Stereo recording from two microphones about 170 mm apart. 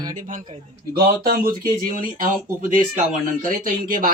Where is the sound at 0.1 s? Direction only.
50° right (ahead or behind).